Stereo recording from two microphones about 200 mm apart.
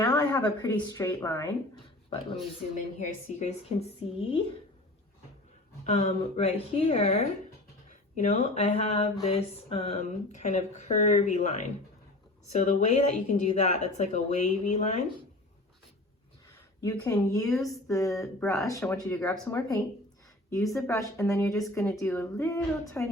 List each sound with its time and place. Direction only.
0.0 s speech: 20° left (ahead or behind)
2.7 s speech: 35° left (ahead or behind)
5.8 s speech: 35° left (ahead or behind)
16.8 s speech: 15° left (ahead or behind)
17.5 s a sound: centre (ahead or behind)
17.8 s speech: 15° left (ahead or behind)